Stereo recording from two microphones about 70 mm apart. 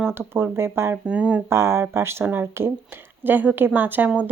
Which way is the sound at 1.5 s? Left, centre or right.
Right.